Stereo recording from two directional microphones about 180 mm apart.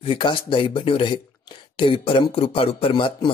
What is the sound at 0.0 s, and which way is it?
Speech, 30° left (ahead or behind).